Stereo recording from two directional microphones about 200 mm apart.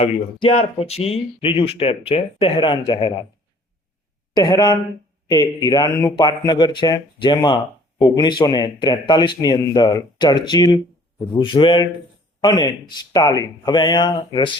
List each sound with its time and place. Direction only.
0.0 s speech: 30° left (ahead or behind)
4.4 s speech: 20° left (ahead or behind)